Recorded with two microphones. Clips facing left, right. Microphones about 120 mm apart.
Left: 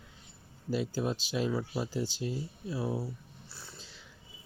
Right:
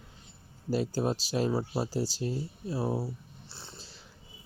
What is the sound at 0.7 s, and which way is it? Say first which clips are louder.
Speech: right 3 dB; 40° right (ahead or behind).